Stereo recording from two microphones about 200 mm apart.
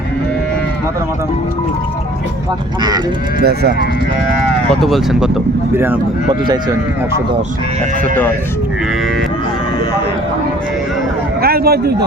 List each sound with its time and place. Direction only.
3.4 s speech: 55° right (ahead or behind)
4.7 s speech: centre (ahead or behind)
11.4 s a man's voice: 50° right (ahead or behind)